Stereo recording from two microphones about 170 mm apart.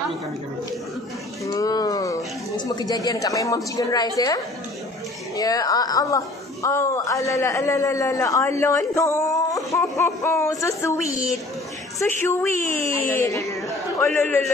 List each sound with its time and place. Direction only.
1.4 s a man's voice: 20° left (ahead or behind)